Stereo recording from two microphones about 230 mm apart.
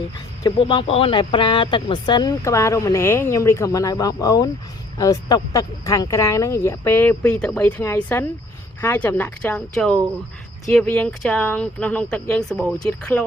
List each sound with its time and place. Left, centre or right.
0.4 s speech: left; by 13.2 s centre